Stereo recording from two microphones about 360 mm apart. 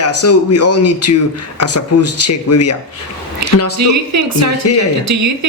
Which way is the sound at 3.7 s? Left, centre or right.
Right.